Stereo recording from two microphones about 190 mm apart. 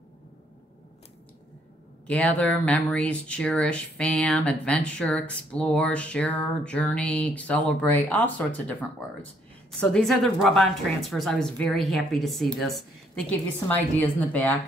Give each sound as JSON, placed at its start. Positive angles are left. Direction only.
{"t": 2.0, "sound": "a woman's voice", "side_deg": 5}